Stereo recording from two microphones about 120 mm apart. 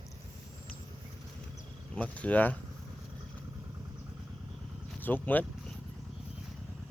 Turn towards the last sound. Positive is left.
turn(degrees=15)  # may be behind; listen again after turning